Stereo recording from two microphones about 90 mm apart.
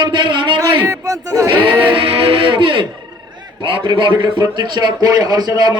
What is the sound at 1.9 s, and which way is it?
Music, 90° right.